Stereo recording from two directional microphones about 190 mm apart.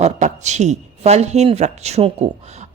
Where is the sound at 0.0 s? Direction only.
40° right (ahead or behind).